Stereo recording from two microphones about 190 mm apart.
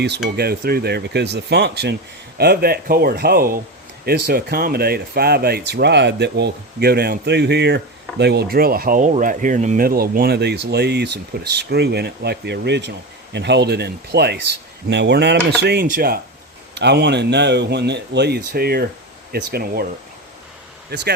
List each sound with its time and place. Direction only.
0.3 s speech: 55° right (ahead or behind)
16.7 s speech: 65° right (ahead or behind)